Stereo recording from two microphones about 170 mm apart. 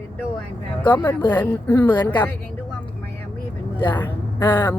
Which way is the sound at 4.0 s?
10° left (ahead or behind).